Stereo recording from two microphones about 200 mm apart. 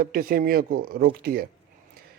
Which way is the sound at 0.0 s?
45° right (ahead or behind).